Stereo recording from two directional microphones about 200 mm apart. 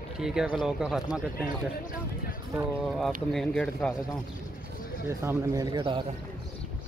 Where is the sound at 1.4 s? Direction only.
45° left (ahead or behind).